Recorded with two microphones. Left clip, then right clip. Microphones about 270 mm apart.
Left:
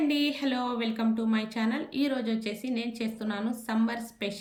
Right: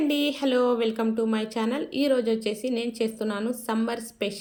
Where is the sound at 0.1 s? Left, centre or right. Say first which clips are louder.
Right 4 dB; centre.